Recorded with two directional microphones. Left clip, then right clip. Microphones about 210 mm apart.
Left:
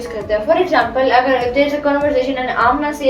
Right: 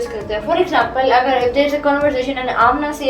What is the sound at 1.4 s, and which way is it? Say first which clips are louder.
Speech: even; 25° right (ahead or behind).